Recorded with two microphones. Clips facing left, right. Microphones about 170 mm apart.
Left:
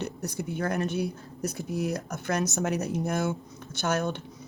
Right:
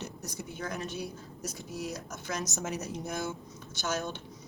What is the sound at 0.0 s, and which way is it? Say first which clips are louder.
Speech: left 8 dB; 60° left (ahead or behind).